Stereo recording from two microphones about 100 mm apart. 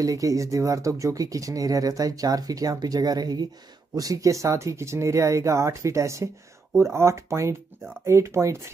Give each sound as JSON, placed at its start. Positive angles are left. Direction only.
{"t": 0.0, "sound": "speech", "side_deg": -35}